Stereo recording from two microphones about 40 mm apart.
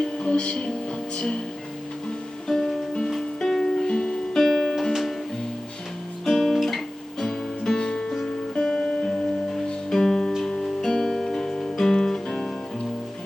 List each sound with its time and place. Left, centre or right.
0.0 s music: left
2.5 s music: centre
6.2 s guitar: centre
7.8 s music: centre